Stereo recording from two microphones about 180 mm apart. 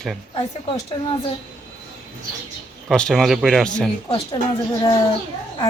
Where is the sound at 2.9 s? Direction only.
5° left (ahead or behind).